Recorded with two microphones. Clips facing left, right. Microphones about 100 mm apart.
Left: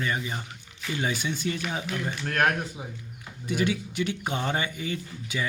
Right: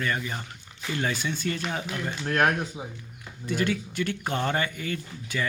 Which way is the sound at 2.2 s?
20° right (ahead or behind).